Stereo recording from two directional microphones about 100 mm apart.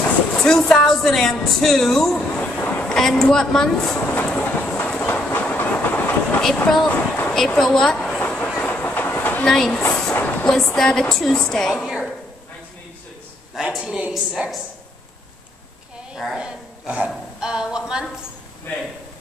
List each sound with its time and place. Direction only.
0.4 s a sound: 5° left (ahead or behind)
6.4 s a woman's voice: 10° left (ahead or behind)
6.9 s a sound: 15° left (ahead or behind)
7.3 s a woman's voice: 5° left (ahead or behind)
8.2 s train: 10° left (ahead or behind)
9.5 s a woman's voice: 5° left (ahead or behind)
9.8 s train: 5° left (ahead or behind)
10.1 s a sound: 15° left (ahead or behind)
10.5 s a woman's voice: 5° left (ahead or behind)
13.6 s a woman's voice: 5° right (ahead or behind)
16.3 s speech: 10° right (ahead or behind)
17.4 s a sound: 10° right (ahead or behind)